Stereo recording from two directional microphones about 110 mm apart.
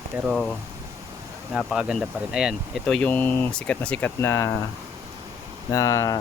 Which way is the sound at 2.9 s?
15° left (ahead or behind).